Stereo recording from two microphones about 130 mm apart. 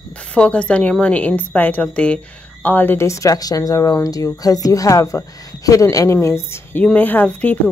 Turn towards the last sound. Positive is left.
turn(degrees=10)  # may be behind; listen again after turning